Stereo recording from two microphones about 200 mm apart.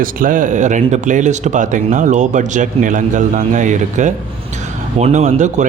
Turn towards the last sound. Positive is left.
turn(degrees=-35)  # may be behind; listen again after turning